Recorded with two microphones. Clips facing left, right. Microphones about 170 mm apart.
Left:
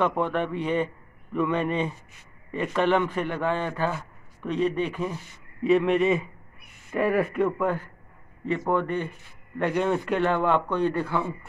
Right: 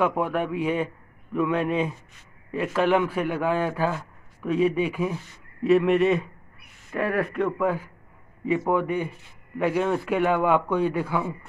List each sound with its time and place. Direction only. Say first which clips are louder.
0.0 s a man's voice: right 1 dB; 5° right (ahead or behind)